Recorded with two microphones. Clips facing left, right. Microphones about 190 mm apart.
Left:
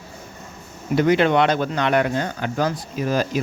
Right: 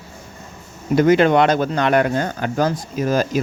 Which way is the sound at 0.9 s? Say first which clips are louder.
Right 3 dB; 45° right (ahead or behind).